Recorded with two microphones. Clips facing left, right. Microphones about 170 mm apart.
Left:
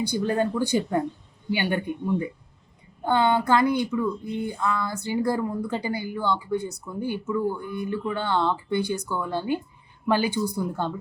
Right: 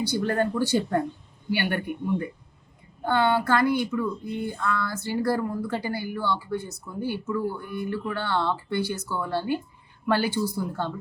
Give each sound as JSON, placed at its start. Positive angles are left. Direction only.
{"t": 0.2, "sound": "speech", "side_deg": 15}
{"t": 3.1, "sound": "speech", "side_deg": 20}